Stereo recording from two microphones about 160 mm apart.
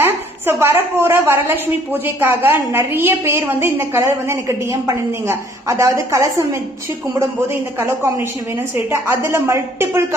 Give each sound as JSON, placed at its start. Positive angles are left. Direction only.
{"t": 0.0, "sound": "a woman's voice", "side_deg": -15}
{"t": 7.8, "sound": "a woman's voice", "side_deg": -15}